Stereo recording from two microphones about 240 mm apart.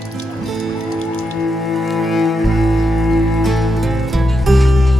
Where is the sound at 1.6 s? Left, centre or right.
Centre.